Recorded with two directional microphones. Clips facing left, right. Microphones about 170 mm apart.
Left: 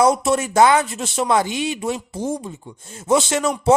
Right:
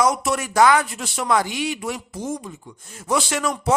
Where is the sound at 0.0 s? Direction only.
25° left (ahead or behind).